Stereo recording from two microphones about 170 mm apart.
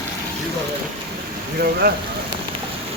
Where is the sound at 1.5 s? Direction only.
65° right (ahead or behind).